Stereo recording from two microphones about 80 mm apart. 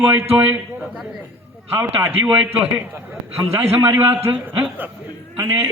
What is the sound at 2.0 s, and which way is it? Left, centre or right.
A man's voice, right.